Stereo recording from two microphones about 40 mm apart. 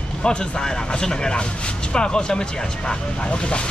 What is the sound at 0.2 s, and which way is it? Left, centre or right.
Speech, centre.